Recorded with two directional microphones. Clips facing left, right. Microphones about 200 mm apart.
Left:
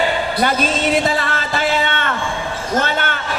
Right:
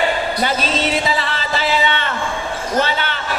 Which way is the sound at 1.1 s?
50° left (ahead or behind).